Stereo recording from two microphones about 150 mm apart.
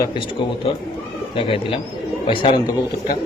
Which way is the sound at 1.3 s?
35° left (ahead or behind).